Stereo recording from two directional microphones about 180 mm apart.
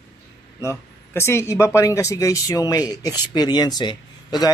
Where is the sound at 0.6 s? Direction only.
15° left (ahead or behind).